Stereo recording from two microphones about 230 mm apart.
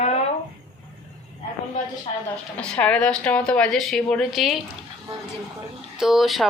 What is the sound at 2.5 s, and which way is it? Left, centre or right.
A woman's voice, centre.